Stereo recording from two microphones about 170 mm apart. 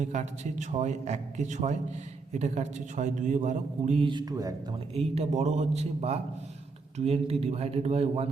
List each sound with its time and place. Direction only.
0.0 s a man's voice: 45° right (ahead or behind); by 4.5 s 20° right (ahead or behind)
4.9 s a man's voice: 40° right (ahead or behind)